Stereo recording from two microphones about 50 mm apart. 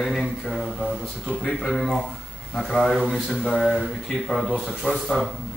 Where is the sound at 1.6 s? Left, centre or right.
Centre.